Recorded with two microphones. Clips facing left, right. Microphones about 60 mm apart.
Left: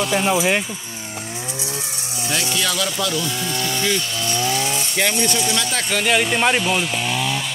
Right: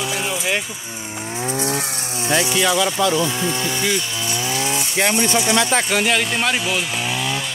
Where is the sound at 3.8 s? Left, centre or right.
Centre.